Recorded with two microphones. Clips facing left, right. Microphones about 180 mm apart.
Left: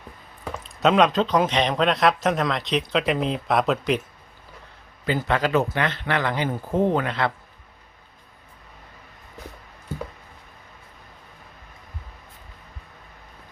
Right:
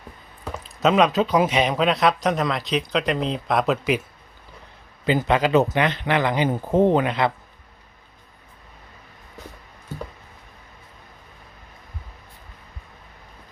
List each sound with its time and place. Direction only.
0.5 s speech: centre (ahead or behind)
5.0 s a man's voice: 15° right (ahead or behind)